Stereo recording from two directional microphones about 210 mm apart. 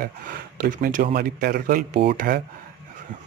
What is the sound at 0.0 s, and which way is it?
Speech, 45° right (ahead or behind).